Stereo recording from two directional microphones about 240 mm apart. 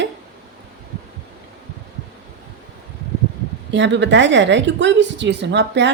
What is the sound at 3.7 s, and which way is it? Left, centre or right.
A woman's voice, right.